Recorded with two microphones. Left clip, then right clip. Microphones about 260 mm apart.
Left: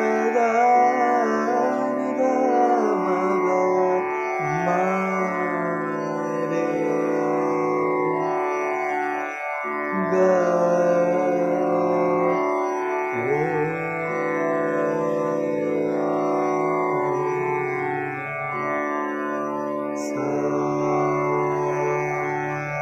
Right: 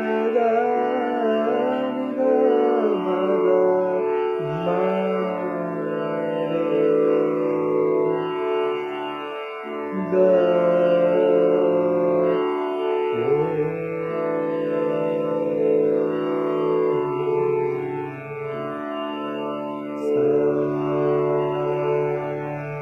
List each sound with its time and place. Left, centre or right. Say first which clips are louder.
1.0 s music: left 3 dB; left
7.4 s music: right 1 dB; left
10.2 s music: right 3 dB; centre